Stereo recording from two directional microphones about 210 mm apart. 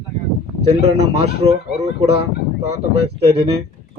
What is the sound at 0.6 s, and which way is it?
A man's voice, 30° right (ahead or behind).